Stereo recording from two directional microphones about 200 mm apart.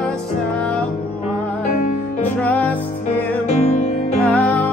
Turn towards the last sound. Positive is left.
turn(degrees=5)  # may be behind; listen again after turning